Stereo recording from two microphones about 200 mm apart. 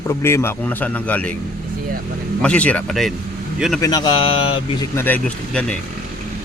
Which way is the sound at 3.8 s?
20° left (ahead or behind).